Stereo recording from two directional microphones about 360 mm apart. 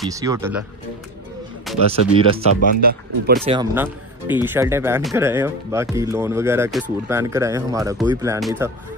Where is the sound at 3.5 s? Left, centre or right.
Centre.